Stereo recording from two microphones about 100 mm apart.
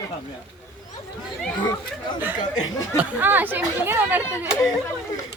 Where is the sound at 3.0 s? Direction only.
20° right (ahead or behind).